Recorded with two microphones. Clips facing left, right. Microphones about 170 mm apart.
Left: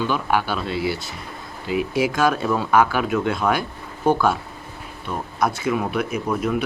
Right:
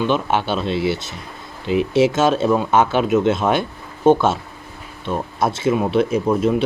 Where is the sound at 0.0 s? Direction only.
25° right (ahead or behind).